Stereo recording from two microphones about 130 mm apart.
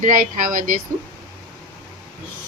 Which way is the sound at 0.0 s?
90° right.